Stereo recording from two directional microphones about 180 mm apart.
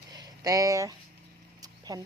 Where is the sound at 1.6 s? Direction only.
20° right (ahead or behind).